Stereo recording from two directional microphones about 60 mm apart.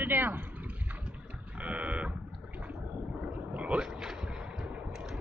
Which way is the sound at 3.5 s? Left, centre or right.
Right.